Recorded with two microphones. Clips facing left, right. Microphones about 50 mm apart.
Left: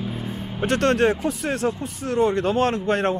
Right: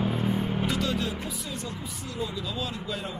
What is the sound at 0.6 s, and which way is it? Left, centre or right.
Speech, left.